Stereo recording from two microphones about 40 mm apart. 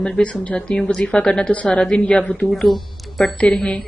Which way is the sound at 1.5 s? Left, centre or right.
Left.